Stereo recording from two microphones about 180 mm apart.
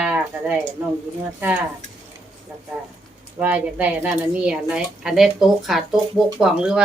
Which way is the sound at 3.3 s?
10° right (ahead or behind).